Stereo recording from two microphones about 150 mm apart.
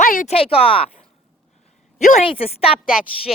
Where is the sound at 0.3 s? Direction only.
40° left (ahead or behind).